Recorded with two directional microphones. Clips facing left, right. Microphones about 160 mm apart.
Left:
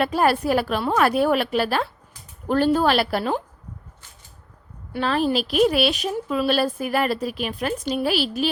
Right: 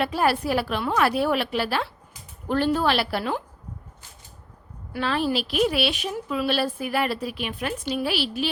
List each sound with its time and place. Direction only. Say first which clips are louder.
0.0 s speech: left 3 dB; 45° left (ahead or behind)
4.9 s speech: left 3 dB; 40° left (ahead or behind)